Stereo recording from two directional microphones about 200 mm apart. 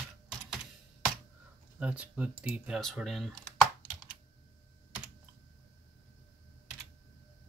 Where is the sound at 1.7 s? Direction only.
5° right (ahead or behind).